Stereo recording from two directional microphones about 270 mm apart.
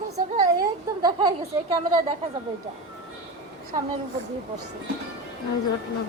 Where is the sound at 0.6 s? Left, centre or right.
Centre.